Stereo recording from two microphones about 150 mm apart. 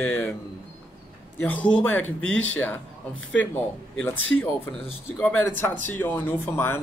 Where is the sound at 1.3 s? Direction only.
10° left (ahead or behind).